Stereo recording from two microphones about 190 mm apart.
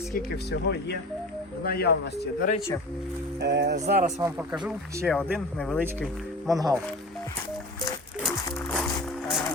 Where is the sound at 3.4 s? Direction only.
65° right (ahead or behind).